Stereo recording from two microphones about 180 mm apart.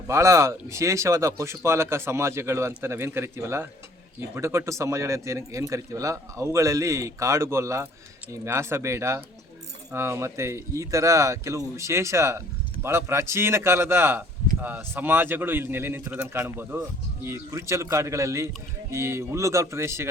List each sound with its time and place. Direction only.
0.1 s speech: 15° right (ahead or behind)